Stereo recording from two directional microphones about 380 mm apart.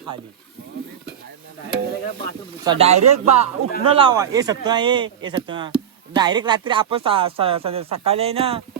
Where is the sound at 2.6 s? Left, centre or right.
Centre.